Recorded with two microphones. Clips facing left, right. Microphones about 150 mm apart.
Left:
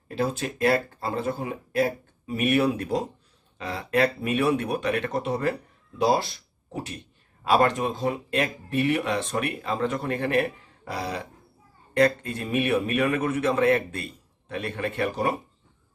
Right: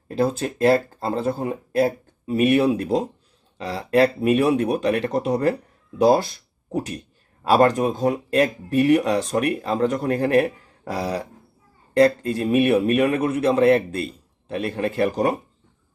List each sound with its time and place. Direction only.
0.2 s a man's voice: 35° right (ahead or behind)